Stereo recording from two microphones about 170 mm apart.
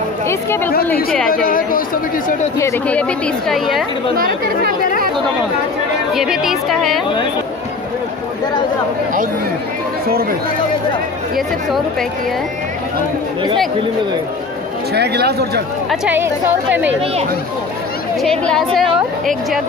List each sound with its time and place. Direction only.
1.3 s a woman's voice: 55° left (ahead or behind)
2.6 s a woman's voice: 5° left (ahead or behind)
6.1 s a woman's voice: 5° right (ahead or behind)
15.0 s speech: 70° right (ahead or behind)
18.2 s a woman's voice: 5° left (ahead or behind)